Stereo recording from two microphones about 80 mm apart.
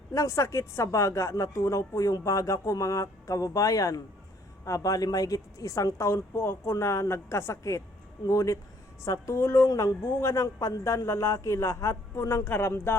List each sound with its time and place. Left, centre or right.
0.1 s speech: left